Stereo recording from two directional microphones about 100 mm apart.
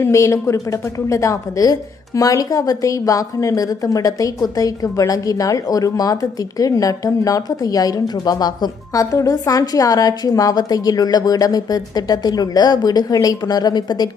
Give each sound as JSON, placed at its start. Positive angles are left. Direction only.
{"t": 0.0, "sound": "speech", "side_deg": 30}